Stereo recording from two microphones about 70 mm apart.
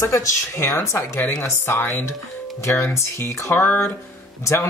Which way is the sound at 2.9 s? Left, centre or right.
Left.